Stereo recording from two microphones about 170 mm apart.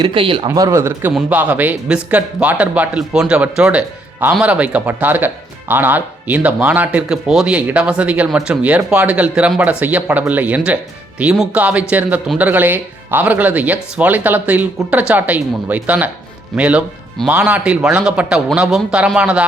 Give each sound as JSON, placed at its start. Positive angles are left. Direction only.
{"t": 0.0, "sound": "speech", "side_deg": -30}